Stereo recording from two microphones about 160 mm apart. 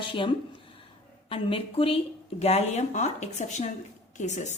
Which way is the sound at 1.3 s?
35° left (ahead or behind).